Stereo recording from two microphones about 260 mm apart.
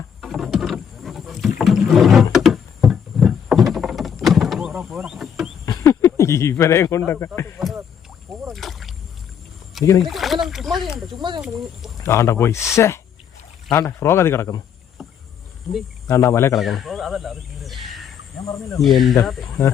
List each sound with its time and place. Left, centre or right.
0.2 s wild animals: centre
1.5 s rowboat: centre
5.6 s speech: centre
7.6 s rowboat: centre
8.4 s splash: centre
10.0 s speech: centre
11.2 s speech: centre
12.0 s speech: centre
15.7 s speech: centre
16.0 s speech: centre
16.6 s speech: centre
18.8 s speech: centre